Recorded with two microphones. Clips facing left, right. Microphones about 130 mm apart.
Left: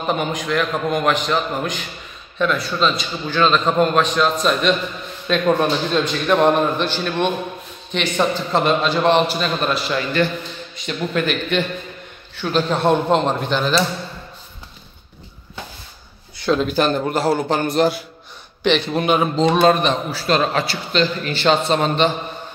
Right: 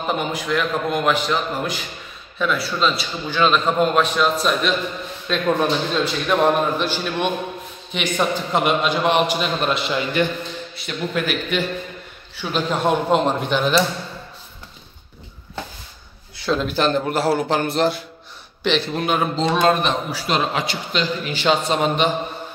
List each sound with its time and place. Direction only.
0.1 s a man's voice: 5° right (ahead or behind)
10.9 s a man's voice: 5° right (ahead or behind)
16.4 s a man's voice: centre (ahead or behind)
20.1 s a man's voice: 15° right (ahead or behind)